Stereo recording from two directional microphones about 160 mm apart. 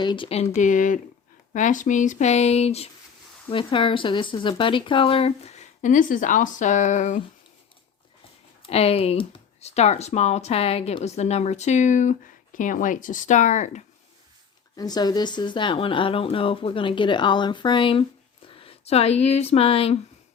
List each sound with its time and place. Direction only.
0.0 s speech: 30° left (ahead or behind); by 7.2 s 50° left (ahead or behind)
8.6 s speech: 40° left (ahead or behind)
14.8 s speech: 25° left (ahead or behind)